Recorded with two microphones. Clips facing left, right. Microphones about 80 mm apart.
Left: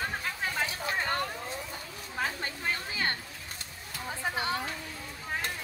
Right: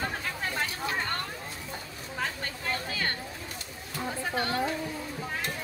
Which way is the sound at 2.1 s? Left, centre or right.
Centre.